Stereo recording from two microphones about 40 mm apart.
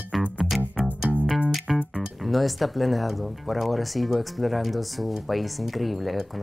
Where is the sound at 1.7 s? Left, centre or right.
Centre.